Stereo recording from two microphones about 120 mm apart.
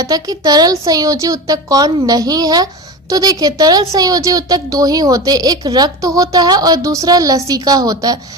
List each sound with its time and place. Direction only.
0.0 s a woman's voice: 30° right (ahead or behind)